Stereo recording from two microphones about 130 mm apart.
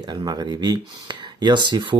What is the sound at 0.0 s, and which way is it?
Speech, 30° right (ahead or behind).